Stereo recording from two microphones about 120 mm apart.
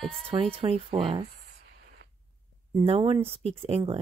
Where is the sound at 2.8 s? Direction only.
50° right (ahead or behind).